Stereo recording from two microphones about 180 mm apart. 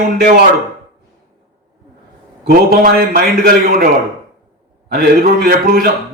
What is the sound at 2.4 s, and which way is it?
A man's voice, 55° right (ahead or behind).